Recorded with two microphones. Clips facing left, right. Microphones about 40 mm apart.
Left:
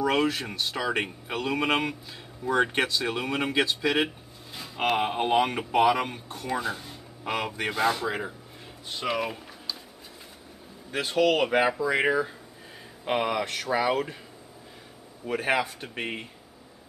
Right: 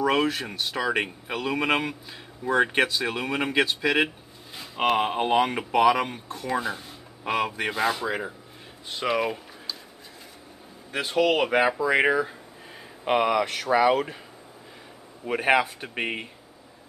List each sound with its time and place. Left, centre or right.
0.0 s speech: centre
10.9 s speech: centre
15.2 s speech: right